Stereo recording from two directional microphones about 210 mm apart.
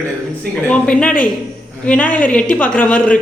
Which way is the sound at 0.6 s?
5° left (ahead or behind).